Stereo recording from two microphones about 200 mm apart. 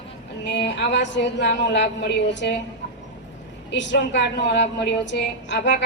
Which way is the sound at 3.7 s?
60° left (ahead or behind).